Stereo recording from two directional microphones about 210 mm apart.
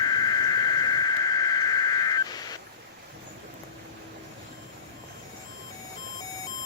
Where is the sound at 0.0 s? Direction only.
20° left (ahead or behind).